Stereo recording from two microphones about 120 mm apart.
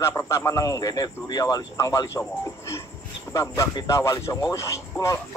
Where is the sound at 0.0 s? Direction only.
20° left (ahead or behind).